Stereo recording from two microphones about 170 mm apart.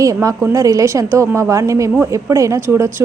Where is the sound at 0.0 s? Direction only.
20° right (ahead or behind).